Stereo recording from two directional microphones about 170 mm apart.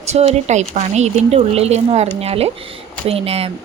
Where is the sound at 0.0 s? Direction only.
40° right (ahead or behind).